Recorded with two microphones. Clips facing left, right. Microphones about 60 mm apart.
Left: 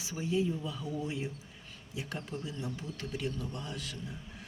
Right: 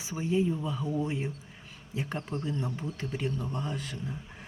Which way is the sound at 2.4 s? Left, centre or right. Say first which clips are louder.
Right 6 dB; right.